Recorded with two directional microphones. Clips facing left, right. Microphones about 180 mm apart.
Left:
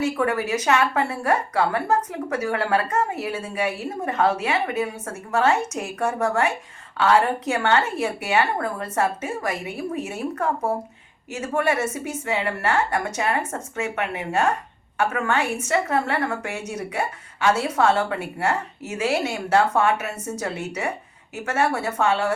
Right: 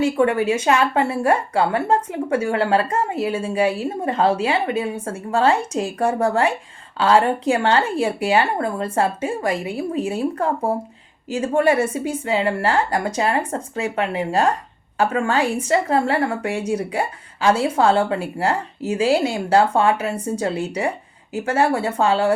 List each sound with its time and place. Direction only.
0.0 s a woman's voice: 30° right (ahead or behind)